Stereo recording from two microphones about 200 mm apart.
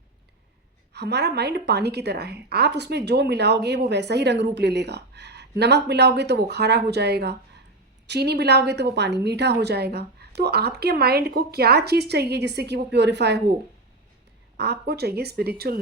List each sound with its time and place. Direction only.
0.9 s a woman's voice: 55° right (ahead or behind)
14.5 s a woman's voice: 55° right (ahead or behind)